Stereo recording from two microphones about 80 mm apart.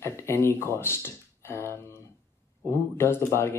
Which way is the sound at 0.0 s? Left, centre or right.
Left.